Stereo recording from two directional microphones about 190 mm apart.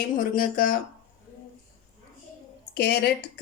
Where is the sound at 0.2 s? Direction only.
50° left (ahead or behind).